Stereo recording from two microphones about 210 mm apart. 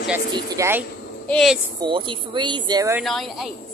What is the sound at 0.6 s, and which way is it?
Speech, 10° right (ahead or behind).